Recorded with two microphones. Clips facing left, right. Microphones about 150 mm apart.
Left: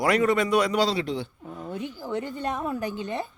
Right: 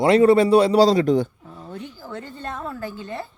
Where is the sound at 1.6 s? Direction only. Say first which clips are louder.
Left 2 dB; 15° left (ahead or behind).